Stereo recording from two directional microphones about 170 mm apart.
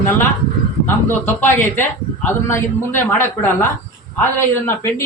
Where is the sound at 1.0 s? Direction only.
10° left (ahead or behind).